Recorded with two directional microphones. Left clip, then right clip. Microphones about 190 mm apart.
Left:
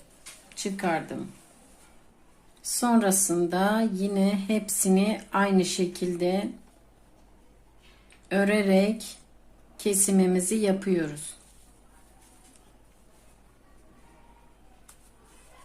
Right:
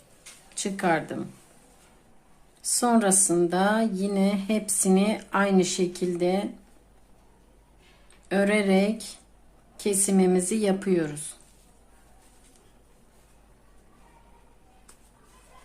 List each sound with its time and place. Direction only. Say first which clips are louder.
0.5 s a woman's voice: right 3 dB; 20° right (ahead or behind)
2.6 s speech: right 2 dB; 10° right (ahead or behind)
8.3 s speech: right 1 dB; 10° right (ahead or behind)